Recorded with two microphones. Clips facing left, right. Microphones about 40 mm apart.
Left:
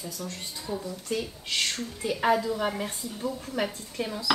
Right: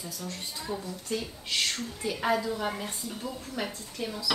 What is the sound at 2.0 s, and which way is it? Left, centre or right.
Speech, centre.